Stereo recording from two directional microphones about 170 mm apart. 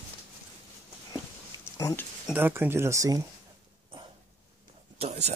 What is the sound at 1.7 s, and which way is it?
Speech, 20° left (ahead or behind).